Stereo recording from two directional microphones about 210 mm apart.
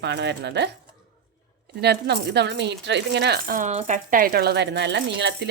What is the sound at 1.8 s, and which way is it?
A woman's voice, 55° right (ahead or behind).